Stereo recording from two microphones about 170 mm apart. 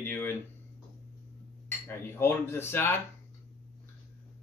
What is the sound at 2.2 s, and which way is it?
Speech, 15° left (ahead or behind).